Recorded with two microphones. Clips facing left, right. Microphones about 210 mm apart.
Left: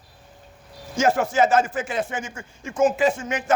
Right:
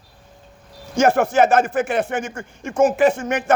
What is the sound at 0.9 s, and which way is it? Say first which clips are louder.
Speech: right 4 dB; 65° right (ahead or behind).